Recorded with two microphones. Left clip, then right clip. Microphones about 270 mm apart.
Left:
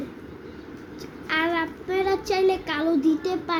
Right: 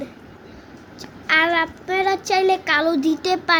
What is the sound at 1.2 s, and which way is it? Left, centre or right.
Speech, right.